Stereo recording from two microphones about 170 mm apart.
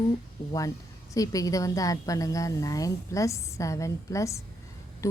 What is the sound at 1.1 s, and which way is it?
A woman's voice, 20° left (ahead or behind).